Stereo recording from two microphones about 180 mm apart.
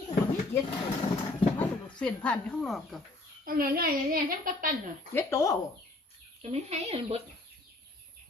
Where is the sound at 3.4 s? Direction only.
55° right (ahead or behind).